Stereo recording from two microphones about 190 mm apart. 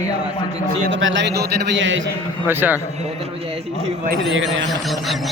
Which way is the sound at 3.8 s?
45° right (ahead or behind).